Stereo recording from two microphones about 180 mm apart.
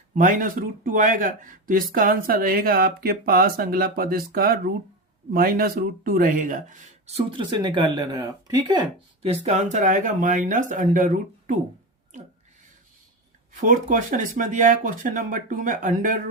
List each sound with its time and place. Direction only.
0.1 s speech: 45° right (ahead or behind)
7.1 s speech: 25° right (ahead or behind); by 11.5 s 50° right (ahead or behind)
13.6 s speech: 45° right (ahead or behind)